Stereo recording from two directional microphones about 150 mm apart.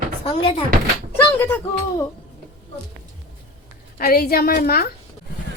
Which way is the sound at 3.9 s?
75° left (ahead or behind).